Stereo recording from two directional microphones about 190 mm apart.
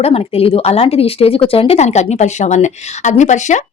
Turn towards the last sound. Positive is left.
turn(degrees=40)  # may be behind; listen again after turning